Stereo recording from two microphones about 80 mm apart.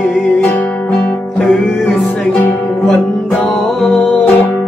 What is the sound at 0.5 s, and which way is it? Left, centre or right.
Music, centre.